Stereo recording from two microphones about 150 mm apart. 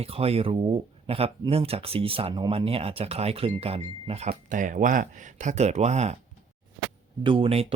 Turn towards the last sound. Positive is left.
turn(degrees=-40)  # may be behind; listen again after turning